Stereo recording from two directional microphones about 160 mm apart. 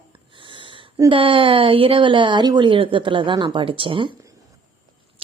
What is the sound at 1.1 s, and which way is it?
A woman's voice, 30° right (ahead or behind).